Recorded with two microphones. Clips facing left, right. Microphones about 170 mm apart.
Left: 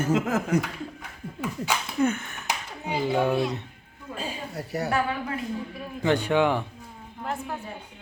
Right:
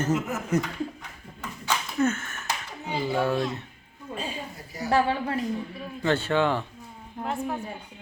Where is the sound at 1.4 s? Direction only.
10° left (ahead or behind).